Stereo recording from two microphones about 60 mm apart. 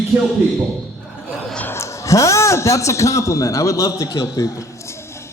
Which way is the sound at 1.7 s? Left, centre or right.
Left.